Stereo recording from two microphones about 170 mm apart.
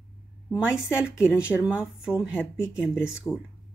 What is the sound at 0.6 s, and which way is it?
A woman's voice, 5° right (ahead or behind).